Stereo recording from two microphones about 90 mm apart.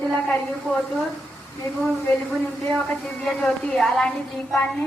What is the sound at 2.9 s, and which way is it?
A woman's voice, 10° left (ahead or behind).